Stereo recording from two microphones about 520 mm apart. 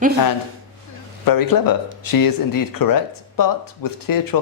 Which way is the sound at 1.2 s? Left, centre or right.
Left.